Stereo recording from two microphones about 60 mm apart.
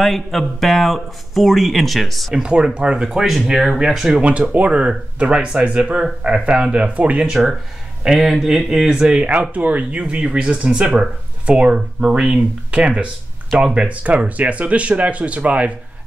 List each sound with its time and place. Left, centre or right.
0.0 s speech: centre
2.4 s speech: centre
4.2 s speech: right
8.2 s speech: centre
9.2 s speech: right
13.8 s speech: right